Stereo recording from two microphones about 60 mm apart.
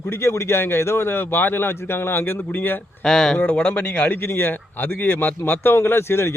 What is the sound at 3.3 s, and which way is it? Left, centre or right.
Speech, left.